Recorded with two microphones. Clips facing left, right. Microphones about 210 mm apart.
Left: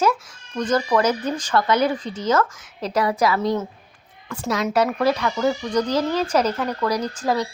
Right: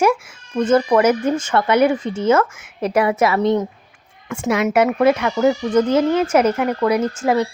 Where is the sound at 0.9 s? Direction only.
10° right (ahead or behind).